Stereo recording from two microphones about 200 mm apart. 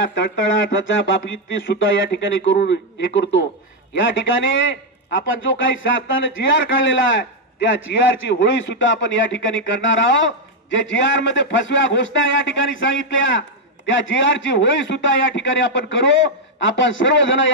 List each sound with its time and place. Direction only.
0.0 s a man's voice: 65° left (ahead or behind)
8.3 s a man's voice: 65° left (ahead or behind)